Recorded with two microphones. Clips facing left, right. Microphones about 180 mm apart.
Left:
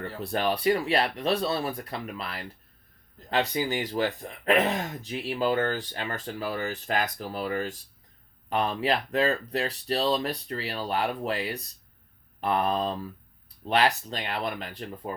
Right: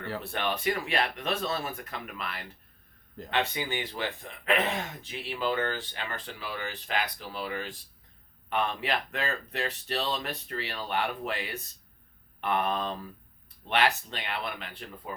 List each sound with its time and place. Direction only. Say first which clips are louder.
0.2 s speech: left 8 dB; 35° left (ahead or behind)